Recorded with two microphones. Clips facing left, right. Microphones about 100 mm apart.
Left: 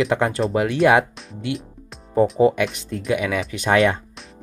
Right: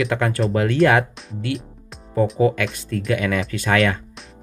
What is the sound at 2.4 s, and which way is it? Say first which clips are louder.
Speech: left 2 dB; 20° left (ahead or behind).